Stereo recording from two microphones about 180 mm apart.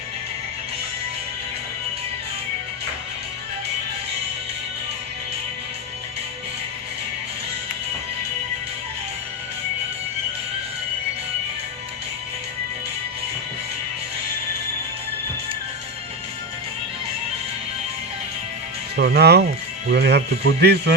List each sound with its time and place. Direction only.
18.9 s speech: 65° right (ahead or behind)